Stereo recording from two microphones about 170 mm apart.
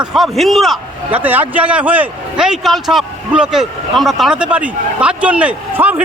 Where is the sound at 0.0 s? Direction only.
Centre (ahead or behind).